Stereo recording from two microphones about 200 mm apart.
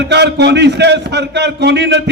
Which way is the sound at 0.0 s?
60° right (ahead or behind).